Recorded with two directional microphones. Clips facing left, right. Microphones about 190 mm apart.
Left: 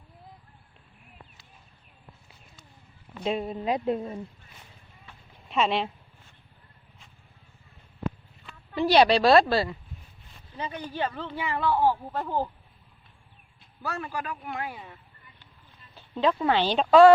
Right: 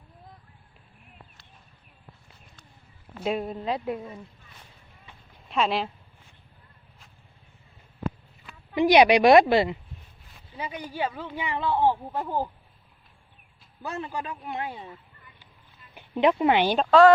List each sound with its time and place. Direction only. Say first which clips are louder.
3.2 s speech: right 1 dB; centre (ahead or behind)
3.6 s speech: left 2 dB; 15° left (ahead or behind)
3.8 s speech: left 4 dB; 30° left (ahead or behind)
5.5 s speech: even; centre (ahead or behind)
8.7 s speech: right 2 dB; 15° right (ahead or behind)
13.8 s a man's voice: even; 20° right (ahead or behind)
16.0 s speech: right 3 dB; 15° right (ahead or behind)